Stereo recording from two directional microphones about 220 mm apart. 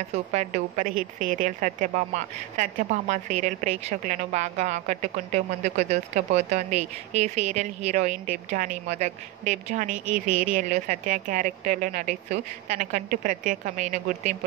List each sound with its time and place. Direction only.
0.3 s a woman's voice: 30° right (ahead or behind)